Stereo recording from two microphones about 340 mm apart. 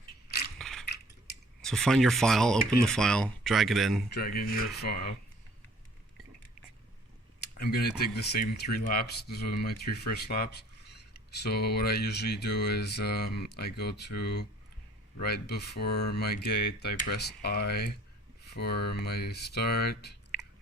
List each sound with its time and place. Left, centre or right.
0.3 s mechanisms: left
0.6 s mechanisms: centre
1.6 s speech: centre
4.1 s speech: left
7.4 s speech: left